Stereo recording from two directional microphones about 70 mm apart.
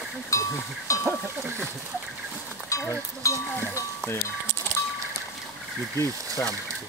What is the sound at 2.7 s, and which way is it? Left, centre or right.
Speech, left.